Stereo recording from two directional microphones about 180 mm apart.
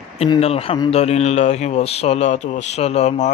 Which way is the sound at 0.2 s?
35° left (ahead or behind).